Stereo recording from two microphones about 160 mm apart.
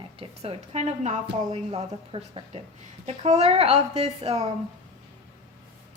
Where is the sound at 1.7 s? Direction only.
35° right (ahead or behind).